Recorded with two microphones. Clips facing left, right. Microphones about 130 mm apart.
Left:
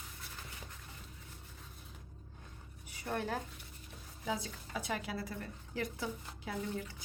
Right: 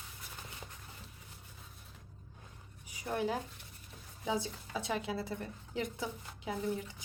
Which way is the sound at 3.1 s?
15° right (ahead or behind).